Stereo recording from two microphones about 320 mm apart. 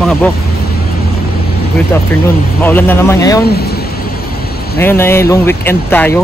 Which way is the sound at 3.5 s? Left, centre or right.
Left.